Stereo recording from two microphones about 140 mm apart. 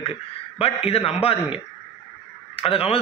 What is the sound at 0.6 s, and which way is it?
A man's voice, 45° left (ahead or behind).